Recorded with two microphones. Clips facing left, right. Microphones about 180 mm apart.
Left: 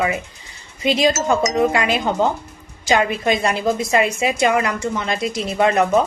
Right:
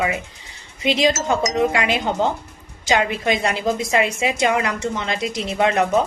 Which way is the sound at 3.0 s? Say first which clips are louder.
Left 2 dB; 20° right (ahead or behind).